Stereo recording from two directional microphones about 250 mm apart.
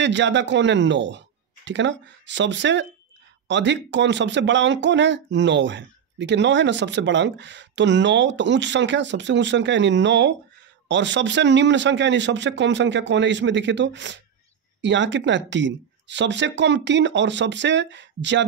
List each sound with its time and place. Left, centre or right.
0.0 s speech: right